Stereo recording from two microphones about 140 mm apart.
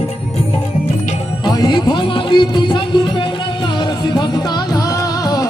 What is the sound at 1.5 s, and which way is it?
Music, 30° left (ahead or behind).